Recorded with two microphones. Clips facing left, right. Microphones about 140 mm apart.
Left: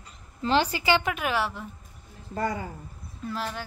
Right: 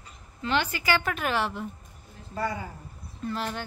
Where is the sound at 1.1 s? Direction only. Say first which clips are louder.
Even; 5° left (ahead or behind).